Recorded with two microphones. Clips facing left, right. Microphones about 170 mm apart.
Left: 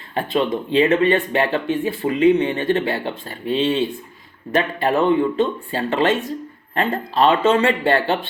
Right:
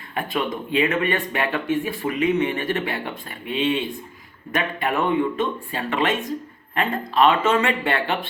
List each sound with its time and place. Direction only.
0.1 s speech: 30° left (ahead or behind)